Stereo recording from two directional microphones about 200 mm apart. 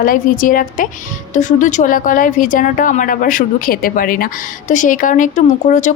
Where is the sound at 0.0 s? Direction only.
45° left (ahead or behind).